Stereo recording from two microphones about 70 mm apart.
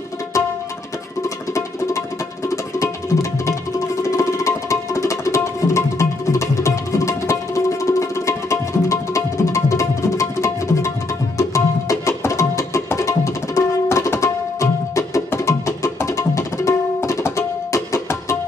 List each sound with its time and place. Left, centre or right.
2.5 s music: left